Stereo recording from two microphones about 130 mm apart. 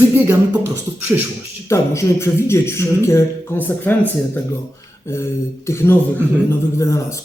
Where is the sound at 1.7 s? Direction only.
20° left (ahead or behind).